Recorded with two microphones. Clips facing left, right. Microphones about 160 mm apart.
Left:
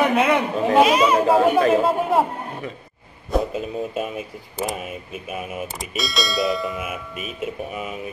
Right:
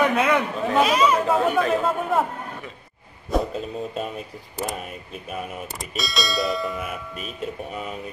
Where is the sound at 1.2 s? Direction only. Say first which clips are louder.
Left 4 dB; 30° left (ahead or behind).